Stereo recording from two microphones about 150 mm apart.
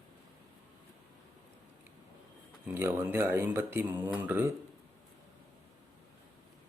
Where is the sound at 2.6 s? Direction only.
15° right (ahead or behind).